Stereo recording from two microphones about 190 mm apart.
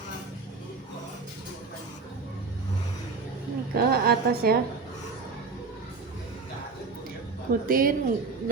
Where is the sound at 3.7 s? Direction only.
50° right (ahead or behind).